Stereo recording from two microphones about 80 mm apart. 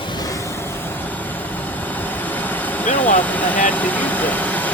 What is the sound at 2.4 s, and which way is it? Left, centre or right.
Vehicle, left.